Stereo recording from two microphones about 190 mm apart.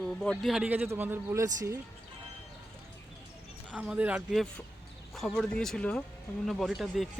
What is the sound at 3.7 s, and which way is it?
A man's voice, 5° right (ahead or behind).